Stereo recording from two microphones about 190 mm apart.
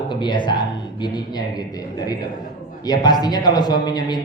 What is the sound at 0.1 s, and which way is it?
A man's voice, 25° left (ahead or behind).